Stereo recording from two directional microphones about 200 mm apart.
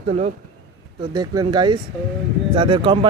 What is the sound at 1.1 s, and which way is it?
Speech, 20° right (ahead or behind).